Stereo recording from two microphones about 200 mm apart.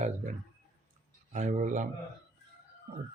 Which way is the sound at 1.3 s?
35° right (ahead or behind).